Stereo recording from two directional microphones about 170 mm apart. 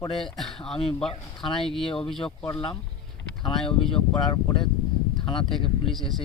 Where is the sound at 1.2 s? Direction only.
30° left (ahead or behind).